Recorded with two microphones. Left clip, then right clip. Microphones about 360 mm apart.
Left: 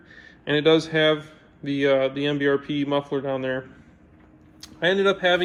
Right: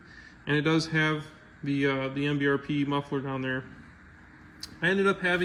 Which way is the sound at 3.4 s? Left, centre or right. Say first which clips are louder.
Left 5 dB; left.